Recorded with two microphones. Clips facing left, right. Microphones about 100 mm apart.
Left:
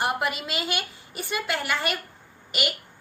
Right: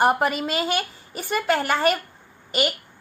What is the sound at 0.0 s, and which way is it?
A woman's voice, 40° right (ahead or behind).